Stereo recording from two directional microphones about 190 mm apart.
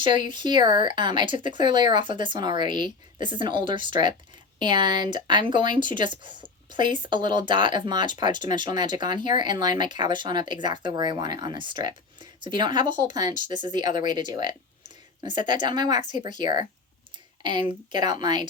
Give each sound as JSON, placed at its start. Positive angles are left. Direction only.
{"t": 0.3, "sound": "speech", "side_deg": -25}